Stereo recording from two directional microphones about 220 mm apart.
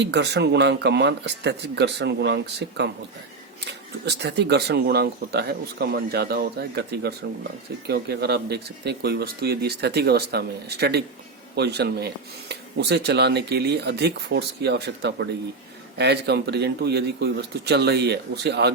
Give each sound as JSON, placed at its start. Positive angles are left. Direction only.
{"t": 0.0, "sound": "speech", "side_deg": -50}